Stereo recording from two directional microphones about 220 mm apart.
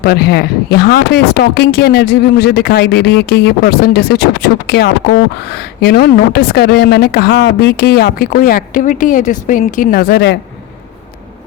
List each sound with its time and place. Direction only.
0.0 s speech: 45° left (ahead or behind)